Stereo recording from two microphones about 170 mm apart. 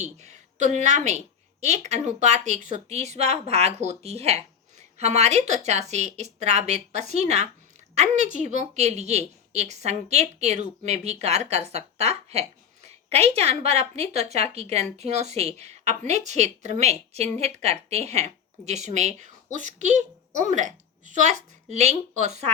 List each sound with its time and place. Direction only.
0.0 s a woman's voice: 40° right (ahead or behind)